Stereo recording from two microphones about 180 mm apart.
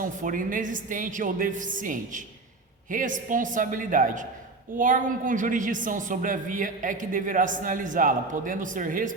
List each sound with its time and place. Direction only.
0.0 s a woman's voice: 50° right (ahead or behind)